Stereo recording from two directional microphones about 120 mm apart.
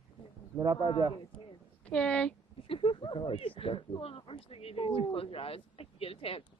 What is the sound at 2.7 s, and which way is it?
Speech, 45° left (ahead or behind).